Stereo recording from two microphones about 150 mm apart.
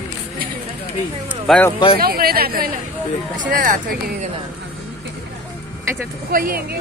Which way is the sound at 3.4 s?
65° right (ahead or behind).